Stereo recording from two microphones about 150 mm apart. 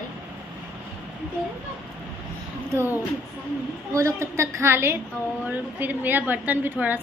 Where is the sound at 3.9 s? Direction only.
20° right (ahead or behind).